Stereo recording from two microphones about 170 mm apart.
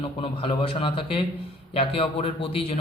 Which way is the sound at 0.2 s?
30° left (ahead or behind).